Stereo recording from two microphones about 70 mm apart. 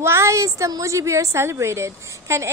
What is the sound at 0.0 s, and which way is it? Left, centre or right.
A woman's voice, right.